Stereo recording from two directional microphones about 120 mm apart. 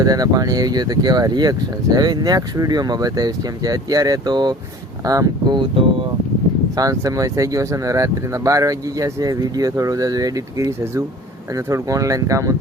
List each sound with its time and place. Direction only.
0.0 s speech: 30° right (ahead or behind)